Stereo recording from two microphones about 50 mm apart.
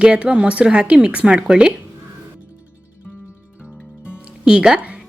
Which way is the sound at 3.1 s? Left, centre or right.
Left.